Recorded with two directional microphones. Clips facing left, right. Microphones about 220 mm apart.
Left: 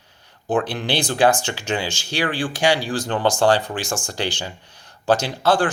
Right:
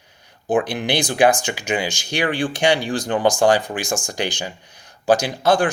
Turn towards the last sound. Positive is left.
turn(degrees=-15)  # may be behind; listen again after turning